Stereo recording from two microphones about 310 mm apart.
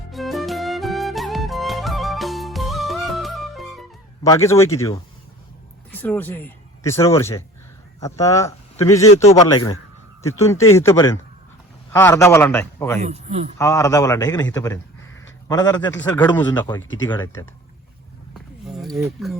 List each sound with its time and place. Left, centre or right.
0.1 s music: centre
4.3 s a man's voice: centre
9.1 s a man's voice: left
13.0 s speech: right
13.6 s a man's voice: centre
18.6 s speech: centre